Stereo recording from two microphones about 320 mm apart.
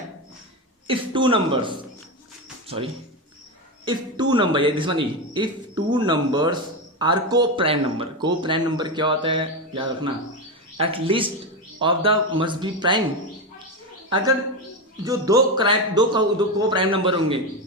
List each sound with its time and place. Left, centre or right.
0.9 s speech: centre
3.8 s speech: centre
15.0 s speech: centre